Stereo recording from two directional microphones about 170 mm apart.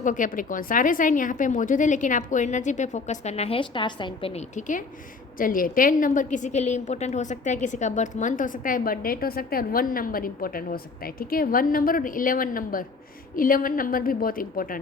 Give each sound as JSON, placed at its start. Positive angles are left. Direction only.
{"t": 0.0, "sound": "a woman's voice", "side_deg": 50}